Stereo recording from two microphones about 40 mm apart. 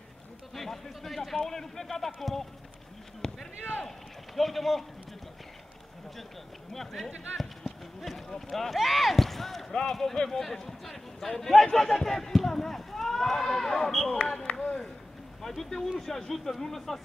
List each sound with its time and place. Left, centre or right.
0.6 s a man's voice: centre
3.2 s a sound: centre
4.4 s speech: centre
6.7 s a man's voice: centre
10.4 s a man's voice: centre
14.4 s chop: left
15.4 s a man's voice: centre